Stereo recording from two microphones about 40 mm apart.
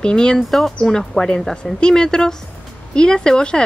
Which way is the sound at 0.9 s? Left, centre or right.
Centre.